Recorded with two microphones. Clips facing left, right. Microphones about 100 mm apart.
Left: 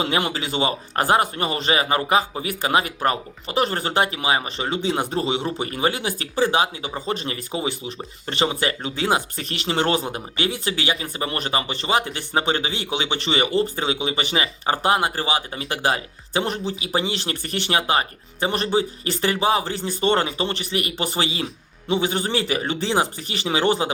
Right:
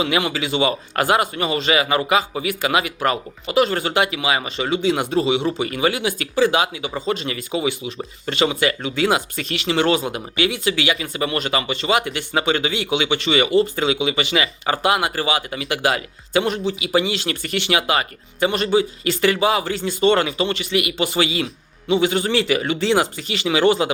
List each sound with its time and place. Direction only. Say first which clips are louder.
0.0 s speech: right 2 dB; 35° left (ahead or behind)